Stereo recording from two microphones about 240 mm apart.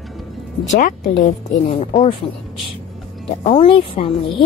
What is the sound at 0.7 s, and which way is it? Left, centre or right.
Speech, left.